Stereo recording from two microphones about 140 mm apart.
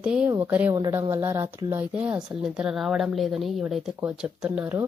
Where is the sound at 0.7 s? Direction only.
25° right (ahead or behind).